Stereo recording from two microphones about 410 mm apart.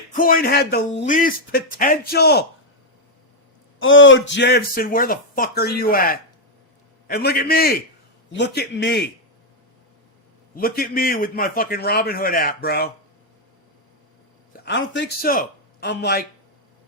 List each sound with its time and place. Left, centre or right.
0.1 s speech: centre
3.8 s speech: left
10.5 s speech: left
14.6 s speech: left